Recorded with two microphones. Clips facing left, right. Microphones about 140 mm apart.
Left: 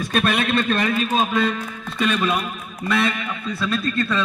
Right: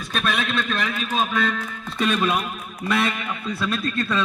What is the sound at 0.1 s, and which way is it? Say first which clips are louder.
Speech: left 4 dB; 50° left (ahead or behind).